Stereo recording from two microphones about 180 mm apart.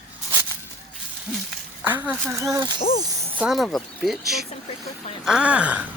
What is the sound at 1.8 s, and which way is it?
Speech, 10° right (ahead or behind).